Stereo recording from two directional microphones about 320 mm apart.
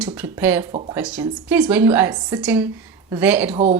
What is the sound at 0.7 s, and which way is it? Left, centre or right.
Speech, centre.